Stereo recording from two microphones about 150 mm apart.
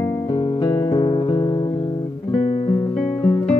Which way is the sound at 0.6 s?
30° left (ahead or behind).